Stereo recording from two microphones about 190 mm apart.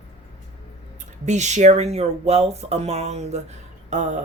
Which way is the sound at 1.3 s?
40° right (ahead or behind).